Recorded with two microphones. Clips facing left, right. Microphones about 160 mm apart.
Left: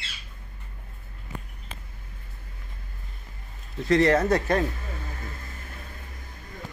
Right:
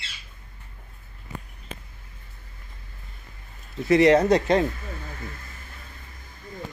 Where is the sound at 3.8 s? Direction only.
10° right (ahead or behind).